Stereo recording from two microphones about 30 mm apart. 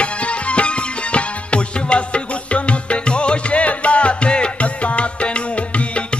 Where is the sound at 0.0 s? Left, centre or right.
Left.